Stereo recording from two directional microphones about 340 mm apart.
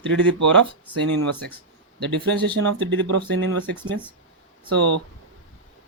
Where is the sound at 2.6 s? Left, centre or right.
Right.